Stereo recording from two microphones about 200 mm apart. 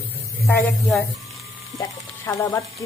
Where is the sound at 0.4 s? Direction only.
Centre (ahead or behind).